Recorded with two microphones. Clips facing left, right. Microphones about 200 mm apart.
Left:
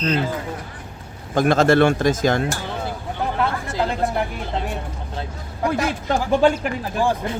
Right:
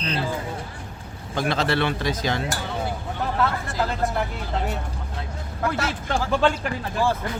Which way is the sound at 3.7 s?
20° left (ahead or behind).